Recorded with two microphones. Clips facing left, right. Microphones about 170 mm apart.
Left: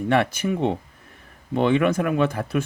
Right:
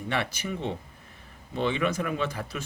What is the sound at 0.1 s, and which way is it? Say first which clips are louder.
Speech: left 9 dB; 50° left (ahead or behind).